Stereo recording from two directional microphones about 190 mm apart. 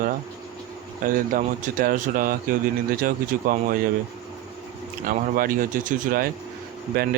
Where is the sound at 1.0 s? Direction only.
45° right (ahead or behind).